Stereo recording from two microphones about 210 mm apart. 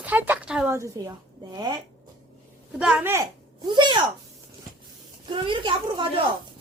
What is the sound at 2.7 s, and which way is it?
A woman's voice, 5° right (ahead or behind).